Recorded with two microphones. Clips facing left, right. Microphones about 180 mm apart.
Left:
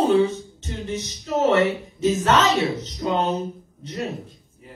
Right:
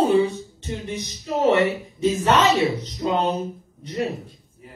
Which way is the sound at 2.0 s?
15° right (ahead or behind).